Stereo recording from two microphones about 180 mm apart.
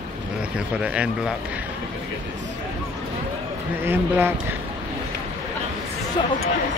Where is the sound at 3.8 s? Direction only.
10° right (ahead or behind).